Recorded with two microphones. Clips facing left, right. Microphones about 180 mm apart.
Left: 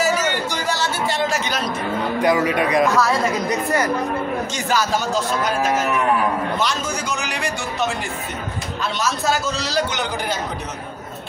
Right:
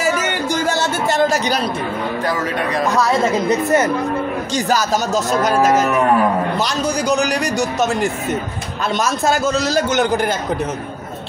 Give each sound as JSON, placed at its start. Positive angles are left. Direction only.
{"t": 0.7, "sound": "a sound", "side_deg": -50}
{"t": 2.2, "sound": "speech", "side_deg": 15}
{"t": 3.0, "sound": "speech", "side_deg": -25}
{"t": 4.6, "sound": "a man's voice", "side_deg": -40}